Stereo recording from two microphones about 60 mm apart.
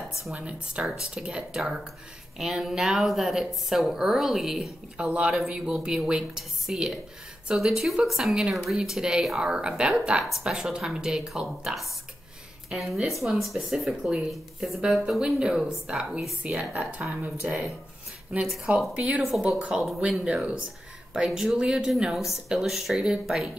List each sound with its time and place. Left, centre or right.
0.3 s a woman's voice: centre
5.0 s speech: centre
5.3 s a woman's voice: centre
18.9 s speech: centre
19.7 s a woman's voice: centre
20.0 s speech: centre